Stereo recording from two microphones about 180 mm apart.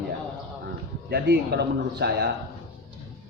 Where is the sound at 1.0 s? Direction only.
60° right (ahead or behind).